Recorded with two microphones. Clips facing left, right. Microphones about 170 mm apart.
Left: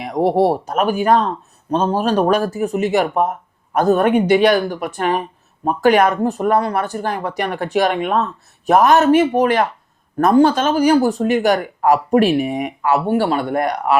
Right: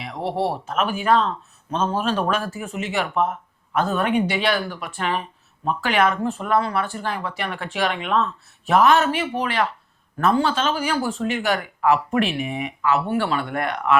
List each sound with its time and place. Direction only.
0.0 s speech: 45° left (ahead or behind)